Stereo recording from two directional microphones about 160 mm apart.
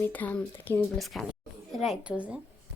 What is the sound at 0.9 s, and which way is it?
A woman's voice, centre (ahead or behind).